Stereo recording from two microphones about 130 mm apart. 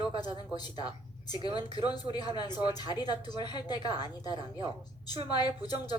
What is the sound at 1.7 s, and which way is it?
Speech, 30° left (ahead or behind).